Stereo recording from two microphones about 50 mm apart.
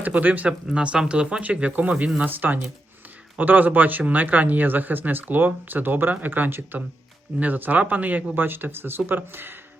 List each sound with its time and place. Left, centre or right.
0.0 s speech: right
0.4 s speech: right